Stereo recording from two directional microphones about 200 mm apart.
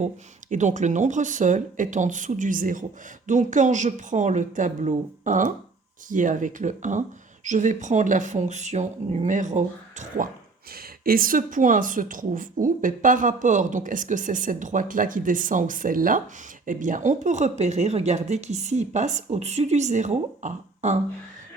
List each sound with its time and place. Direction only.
0.5 s speech: 40° right (ahead or behind)
10.7 s speech: 50° right (ahead or behind)